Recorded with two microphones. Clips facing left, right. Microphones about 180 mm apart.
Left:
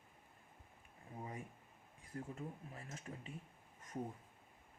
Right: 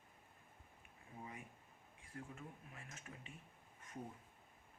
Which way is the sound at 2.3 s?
35° left (ahead or behind).